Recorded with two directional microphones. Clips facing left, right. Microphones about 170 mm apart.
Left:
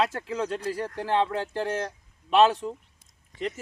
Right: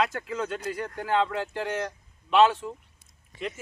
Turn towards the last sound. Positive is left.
turn(degrees=35)  # may be behind; listen again after turning